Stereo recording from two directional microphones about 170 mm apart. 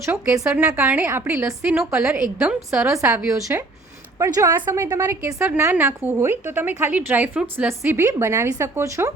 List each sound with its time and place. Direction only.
0.0 s a woman's voice: 15° right (ahead or behind)
2.9 s a woman's voice: 15° right (ahead or behind)